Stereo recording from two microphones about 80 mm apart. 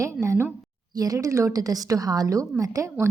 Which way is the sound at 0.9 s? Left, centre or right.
Right.